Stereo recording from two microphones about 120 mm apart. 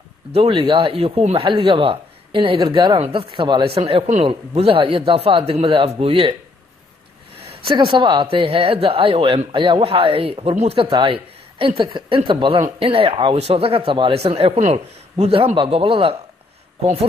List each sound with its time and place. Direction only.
0.3 s speech: 50° right (ahead or behind)
3.7 s speech: 55° right (ahead or behind)
7.7 s speech: 45° right (ahead or behind); by 10.8 s 65° right (ahead or behind)
10.8 s speech: 50° right (ahead or behind)
15.5 s speech: 45° right (ahead or behind)